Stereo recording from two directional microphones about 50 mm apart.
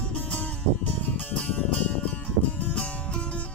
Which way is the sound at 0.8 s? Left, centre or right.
Left.